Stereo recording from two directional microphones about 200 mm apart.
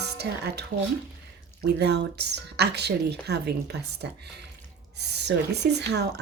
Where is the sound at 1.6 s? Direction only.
55° right (ahead or behind).